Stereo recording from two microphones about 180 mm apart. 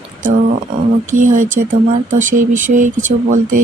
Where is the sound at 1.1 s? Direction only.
45° right (ahead or behind).